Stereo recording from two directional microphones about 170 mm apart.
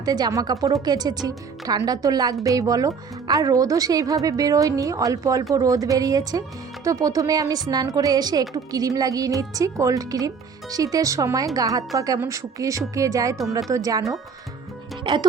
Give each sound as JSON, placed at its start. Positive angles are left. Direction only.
{"t": 0.0, "sound": "a woman's voice", "side_deg": -20}
{"t": 15.0, "sound": "a woman's voice", "side_deg": -25}